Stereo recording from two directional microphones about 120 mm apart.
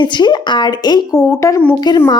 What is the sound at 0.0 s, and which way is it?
Speech, 40° left (ahead or behind).